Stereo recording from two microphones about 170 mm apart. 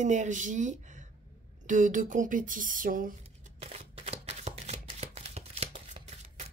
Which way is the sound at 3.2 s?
40° right (ahead or behind).